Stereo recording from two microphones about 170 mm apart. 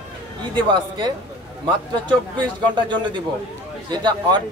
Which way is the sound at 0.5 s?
25° right (ahead or behind).